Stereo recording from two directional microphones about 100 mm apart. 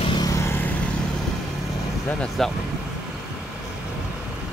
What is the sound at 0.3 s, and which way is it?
Vehicle, 25° left (ahead or behind).